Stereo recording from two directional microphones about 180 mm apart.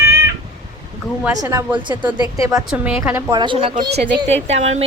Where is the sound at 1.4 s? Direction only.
20° right (ahead or behind).